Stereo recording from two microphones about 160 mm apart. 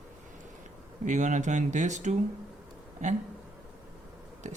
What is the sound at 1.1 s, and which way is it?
Speech, 50° right (ahead or behind).